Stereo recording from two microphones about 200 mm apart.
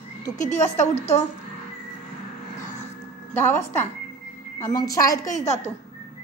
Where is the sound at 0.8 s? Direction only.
35° left (ahead or behind).